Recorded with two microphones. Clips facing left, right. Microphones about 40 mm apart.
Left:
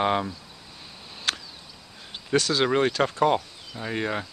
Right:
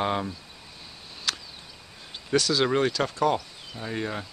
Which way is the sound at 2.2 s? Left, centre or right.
Centre.